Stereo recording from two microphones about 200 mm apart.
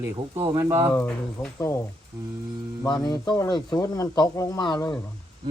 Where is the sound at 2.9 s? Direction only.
20° left (ahead or behind).